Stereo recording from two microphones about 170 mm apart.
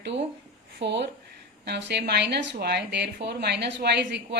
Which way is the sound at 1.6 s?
75° right (ahead or behind).